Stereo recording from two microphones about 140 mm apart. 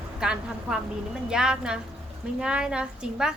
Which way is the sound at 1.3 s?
5° right (ahead or behind).